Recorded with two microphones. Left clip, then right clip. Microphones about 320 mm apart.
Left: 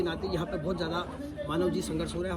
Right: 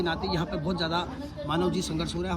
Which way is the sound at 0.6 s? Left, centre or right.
Centre.